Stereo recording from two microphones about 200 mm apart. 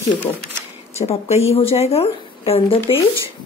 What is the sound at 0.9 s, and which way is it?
Speech, 35° left (ahead or behind).